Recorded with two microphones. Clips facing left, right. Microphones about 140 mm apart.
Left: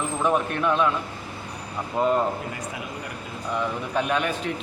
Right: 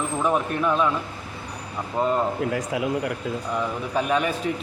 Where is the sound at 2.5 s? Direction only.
90° right.